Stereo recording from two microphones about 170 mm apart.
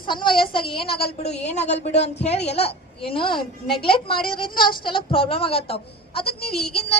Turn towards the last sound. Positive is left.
turn(degrees=35)  # may be behind; listen again after turning